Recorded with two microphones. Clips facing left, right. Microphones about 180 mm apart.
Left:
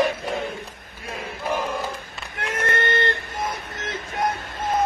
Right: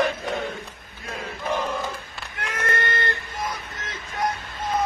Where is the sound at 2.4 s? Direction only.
25° left (ahead or behind).